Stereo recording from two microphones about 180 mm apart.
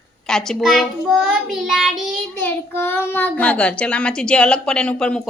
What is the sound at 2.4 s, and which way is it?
A child's voice, 10° left (ahead or behind).